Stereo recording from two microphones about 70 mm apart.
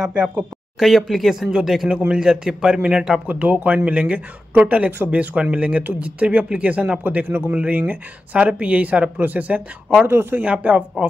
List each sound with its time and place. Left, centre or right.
0.0 s a man's voice: centre
0.7 s a man's voice: centre
3.3 s speech: right
10.0 s speech: right
10.4 s a man's voice: centre